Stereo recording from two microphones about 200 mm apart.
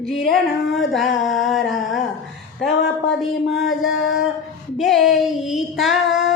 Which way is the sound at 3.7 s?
75° left (ahead or behind).